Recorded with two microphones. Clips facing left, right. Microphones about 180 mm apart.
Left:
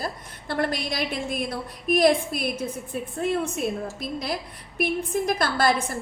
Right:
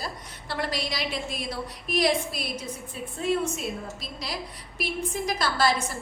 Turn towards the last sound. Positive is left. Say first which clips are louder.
# left 2 dB
turn(degrees=55)  # may be behind; listen again after turning